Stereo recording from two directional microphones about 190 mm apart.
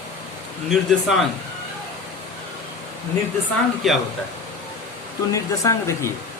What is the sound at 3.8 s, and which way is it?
Speech, centre (ahead or behind).